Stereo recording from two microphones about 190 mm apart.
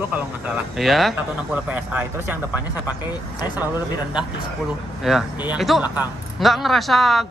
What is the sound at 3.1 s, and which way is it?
Speech, 20° left (ahead or behind).